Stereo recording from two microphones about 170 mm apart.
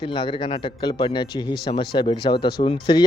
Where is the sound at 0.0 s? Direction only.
30° left (ahead or behind).